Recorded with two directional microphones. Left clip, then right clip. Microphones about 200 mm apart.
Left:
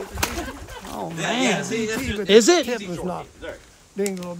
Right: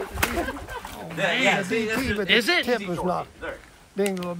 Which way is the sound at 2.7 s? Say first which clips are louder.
Right 3 dB; 5° right (ahead or behind).